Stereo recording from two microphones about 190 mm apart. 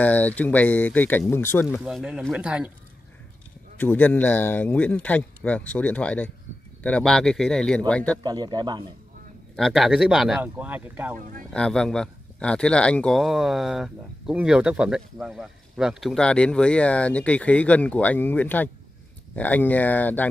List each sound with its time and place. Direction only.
0.0 s speech: 10° left (ahead or behind)
1.8 s speech: 5° right (ahead or behind)
3.7 s speech: 10° left (ahead or behind)
8.2 s speech: 25° right (ahead or behind)
9.6 s speech: centre (ahead or behind)
11.5 s speech: 5° left (ahead or behind)